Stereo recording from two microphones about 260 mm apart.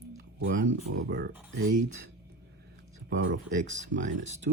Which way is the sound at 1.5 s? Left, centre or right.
Right.